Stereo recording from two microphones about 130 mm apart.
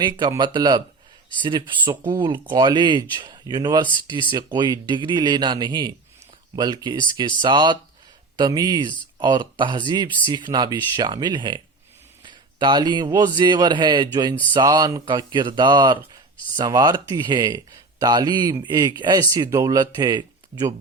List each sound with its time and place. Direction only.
0.0 s speech: 35° right (ahead or behind)